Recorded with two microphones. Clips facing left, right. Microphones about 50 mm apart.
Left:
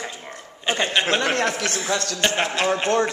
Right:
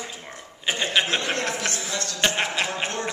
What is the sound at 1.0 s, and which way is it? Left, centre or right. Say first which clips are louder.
Speech: left 5 dB; left.